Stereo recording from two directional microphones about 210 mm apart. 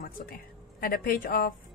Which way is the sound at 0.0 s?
45° left (ahead or behind).